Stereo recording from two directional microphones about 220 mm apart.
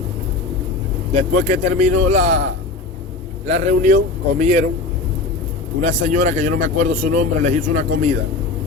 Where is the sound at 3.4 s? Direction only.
30° right (ahead or behind).